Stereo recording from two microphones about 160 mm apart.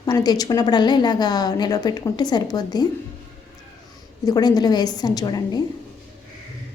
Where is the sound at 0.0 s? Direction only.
25° left (ahead or behind).